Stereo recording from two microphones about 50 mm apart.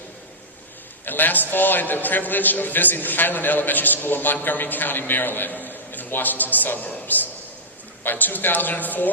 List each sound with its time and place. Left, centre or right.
1.0 s a man's voice: left